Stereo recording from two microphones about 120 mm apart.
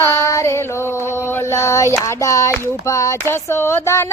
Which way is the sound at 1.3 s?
25° left (ahead or behind).